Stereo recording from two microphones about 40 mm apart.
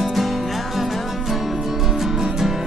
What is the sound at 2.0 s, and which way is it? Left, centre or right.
Music, centre.